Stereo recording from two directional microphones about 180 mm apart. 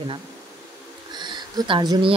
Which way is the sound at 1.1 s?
25° right (ahead or behind).